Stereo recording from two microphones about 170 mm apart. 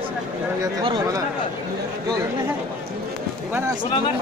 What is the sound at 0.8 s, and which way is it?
Speech, 25° right (ahead or behind).